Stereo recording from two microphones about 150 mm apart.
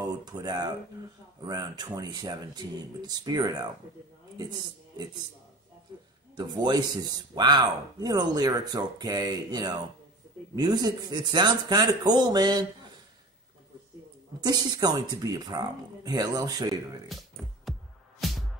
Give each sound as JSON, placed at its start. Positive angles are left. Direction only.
{"t": 0.0, "sound": "a man's voice", "side_deg": -25}
{"t": 6.3, "sound": "speech", "side_deg": -30}
{"t": 14.4, "sound": "speech", "side_deg": -25}
{"t": 17.1, "sound": "speech", "side_deg": 0}
{"t": 18.2, "sound": "music", "side_deg": 0}